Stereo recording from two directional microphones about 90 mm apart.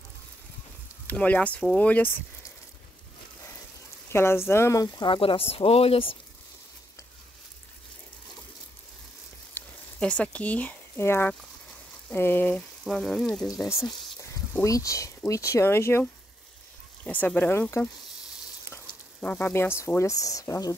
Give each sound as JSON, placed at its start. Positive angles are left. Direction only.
{"t": 1.0, "sound": "speech", "side_deg": 15}
{"t": 4.1, "sound": "speech", "side_deg": 30}
{"t": 5.0, "sound": "speech", "side_deg": 75}
{"t": 9.6, "sound": "a sound", "side_deg": 20}
{"t": 9.9, "sound": "speech", "side_deg": 10}
{"t": 11.0, "sound": "speech", "side_deg": 25}
{"t": 12.8, "sound": "speech", "side_deg": 0}
{"t": 14.6, "sound": "speech", "side_deg": 35}
{"t": 17.0, "sound": "speech", "side_deg": 15}
{"t": 19.2, "sound": "speech", "side_deg": 15}
{"t": 19.5, "sound": "speech", "side_deg": 30}
{"t": 20.0, "sound": "speech", "side_deg": 40}